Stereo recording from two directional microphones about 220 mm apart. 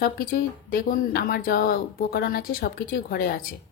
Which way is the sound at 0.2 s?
40° left (ahead or behind).